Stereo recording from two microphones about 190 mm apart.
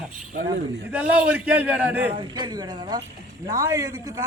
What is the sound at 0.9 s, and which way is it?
Speech, 10° right (ahead or behind).